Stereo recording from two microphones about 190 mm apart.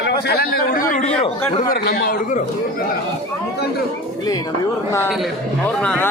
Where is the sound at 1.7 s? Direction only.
50° left (ahead or behind).